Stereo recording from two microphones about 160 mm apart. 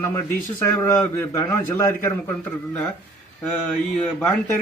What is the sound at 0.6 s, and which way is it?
A man's voice, 15° left (ahead or behind).